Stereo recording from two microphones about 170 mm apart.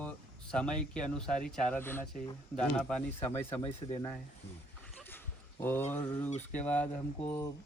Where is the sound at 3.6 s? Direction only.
40° left (ahead or behind).